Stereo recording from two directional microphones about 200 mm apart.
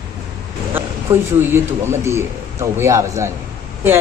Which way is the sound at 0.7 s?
10° right (ahead or behind).